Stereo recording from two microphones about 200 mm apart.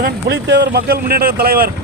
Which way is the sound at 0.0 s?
55° right (ahead or behind).